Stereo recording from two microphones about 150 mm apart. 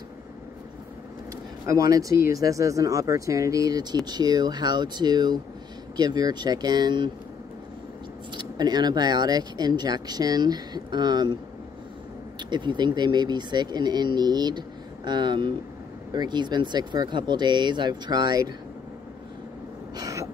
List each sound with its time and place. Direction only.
1.7 s speech: 25° right (ahead or behind)
8.3 s speech: 30° right (ahead or behind)
12.4 s speech: 30° right (ahead or behind)
20.0 s gasp: 20° right (ahead or behind)